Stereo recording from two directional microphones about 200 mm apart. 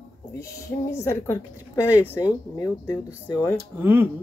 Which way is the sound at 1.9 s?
10° right (ahead or behind).